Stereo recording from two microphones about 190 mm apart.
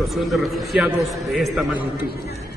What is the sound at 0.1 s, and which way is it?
A man's voice, centre (ahead or behind).